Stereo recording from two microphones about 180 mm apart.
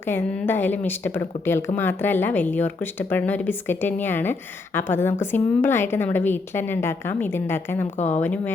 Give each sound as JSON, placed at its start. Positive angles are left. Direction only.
{"t": 0.1, "sound": "speech", "side_deg": 10}
{"t": 7.9, "sound": "speech", "side_deg": 40}
{"t": 8.2, "sound": "speech", "side_deg": 5}